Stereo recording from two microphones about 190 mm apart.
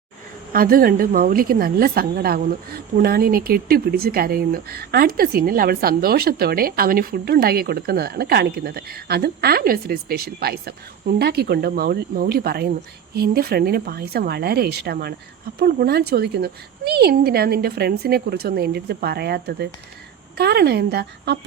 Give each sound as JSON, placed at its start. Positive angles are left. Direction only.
{"t": 0.5, "sound": "a woman's voice", "side_deg": -50}